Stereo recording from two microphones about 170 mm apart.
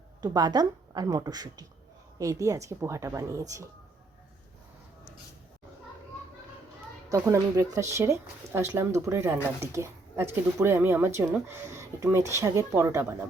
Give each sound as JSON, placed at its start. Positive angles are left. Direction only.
{"t": 0.2, "sound": "a woman's voice", "side_deg": -25}
{"t": 7.1, "sound": "a woman's voice", "side_deg": -20}